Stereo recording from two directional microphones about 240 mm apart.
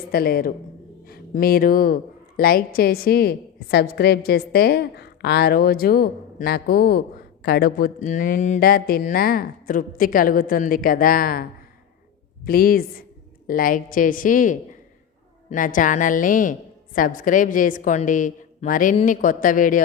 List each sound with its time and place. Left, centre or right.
0.1 s speech: left
12.5 s speech: left